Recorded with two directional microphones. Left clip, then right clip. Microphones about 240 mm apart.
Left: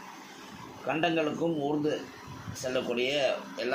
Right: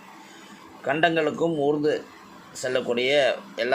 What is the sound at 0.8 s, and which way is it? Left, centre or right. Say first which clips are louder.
A man's voice: right 7 dB; right.